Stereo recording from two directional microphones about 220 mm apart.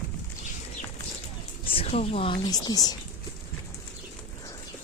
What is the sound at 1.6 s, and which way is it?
Speech, 25° left (ahead or behind).